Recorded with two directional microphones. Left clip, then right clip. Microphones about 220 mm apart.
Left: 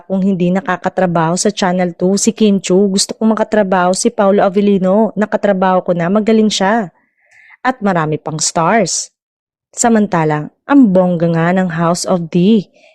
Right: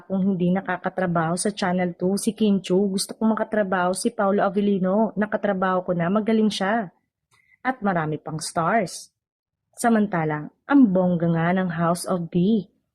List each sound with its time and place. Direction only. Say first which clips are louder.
0.1 s a woman's voice: left 9 dB; 35° left (ahead or behind)